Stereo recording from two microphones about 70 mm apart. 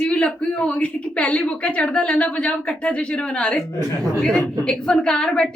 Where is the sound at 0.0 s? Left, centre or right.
Centre.